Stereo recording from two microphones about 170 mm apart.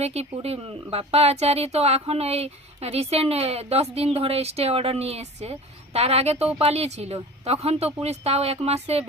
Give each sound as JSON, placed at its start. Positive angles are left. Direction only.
{"t": 0.0, "sound": "a woman's voice", "side_deg": -40}